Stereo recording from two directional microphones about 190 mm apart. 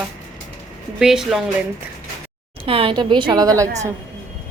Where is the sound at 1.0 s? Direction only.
Centre (ahead or behind).